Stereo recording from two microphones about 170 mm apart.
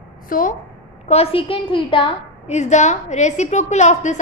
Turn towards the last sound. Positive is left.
turn(degrees=45)  # may be behind; listen again after turning